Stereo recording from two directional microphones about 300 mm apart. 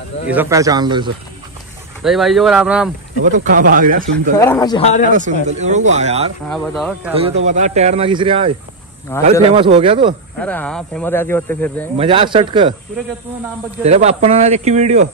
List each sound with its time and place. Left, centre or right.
0.3 s speech: centre
2.0 s speech: centre
3.3 s speech: right
4.4 s a man's voice: centre
5.1 s speech: right
6.5 s speech: centre
7.2 s speech: right
10.4 s speech: centre
12.0 s speech: centre
13.8 s speech: right